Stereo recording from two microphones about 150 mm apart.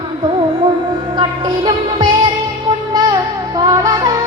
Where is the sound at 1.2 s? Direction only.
30° right (ahead or behind).